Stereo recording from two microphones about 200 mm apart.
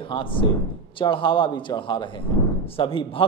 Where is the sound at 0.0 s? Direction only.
25° left (ahead or behind).